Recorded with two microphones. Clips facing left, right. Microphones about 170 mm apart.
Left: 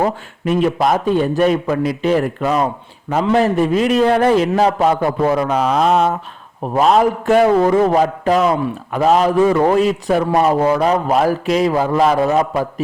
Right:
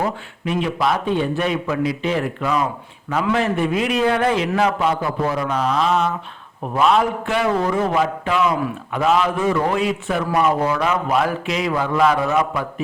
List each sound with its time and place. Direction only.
0.0 s a man's voice: 45° left (ahead or behind)
5.0 s a man's voice: 50° left (ahead or behind)